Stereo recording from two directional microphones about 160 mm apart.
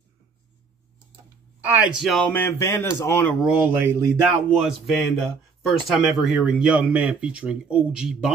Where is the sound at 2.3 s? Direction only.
15° left (ahead or behind).